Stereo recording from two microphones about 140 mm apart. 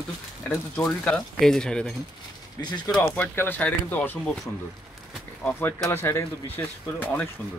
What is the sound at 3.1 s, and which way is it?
Speech, 15° left (ahead or behind).